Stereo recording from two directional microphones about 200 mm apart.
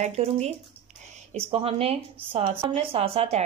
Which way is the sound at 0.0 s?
30° right (ahead or behind).